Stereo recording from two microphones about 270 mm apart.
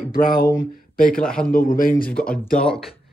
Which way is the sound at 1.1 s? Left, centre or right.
Centre.